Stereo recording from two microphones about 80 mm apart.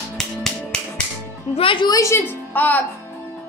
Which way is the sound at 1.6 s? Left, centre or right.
Left.